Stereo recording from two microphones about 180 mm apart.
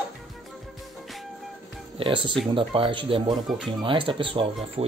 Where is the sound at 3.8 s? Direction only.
30° right (ahead or behind).